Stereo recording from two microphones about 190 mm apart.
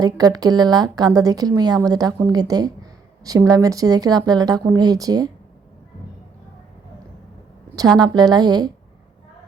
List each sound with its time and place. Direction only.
0.0 s a woman's voice: 20° right (ahead or behind)
7.9 s a woman's voice: 20° right (ahead or behind)